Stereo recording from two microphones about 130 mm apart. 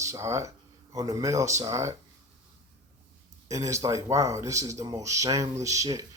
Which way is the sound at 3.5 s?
25° right (ahead or behind).